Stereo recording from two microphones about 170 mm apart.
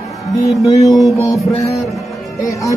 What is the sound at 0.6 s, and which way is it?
A man's voice, 20° left (ahead or behind).